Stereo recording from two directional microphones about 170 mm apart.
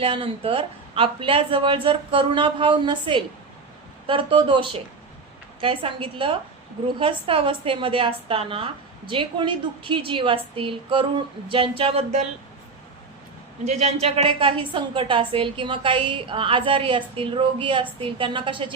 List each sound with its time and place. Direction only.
0.0 s a woman's voice: 30° right (ahead or behind)
13.7 s a woman's voice: 40° right (ahead or behind)